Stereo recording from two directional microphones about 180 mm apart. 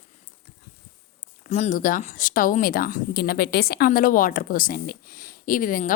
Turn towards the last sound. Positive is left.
turn(degrees=50)  # may be behind; listen again after turning